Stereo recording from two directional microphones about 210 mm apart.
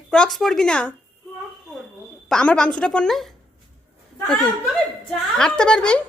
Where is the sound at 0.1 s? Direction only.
5° left (ahead or behind).